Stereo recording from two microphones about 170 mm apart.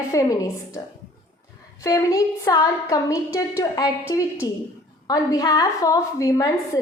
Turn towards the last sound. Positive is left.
turn(degrees=20)  # may be behind; listen again after turning